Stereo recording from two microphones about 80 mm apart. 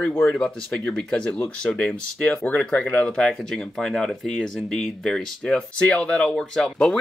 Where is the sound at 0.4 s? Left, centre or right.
Centre.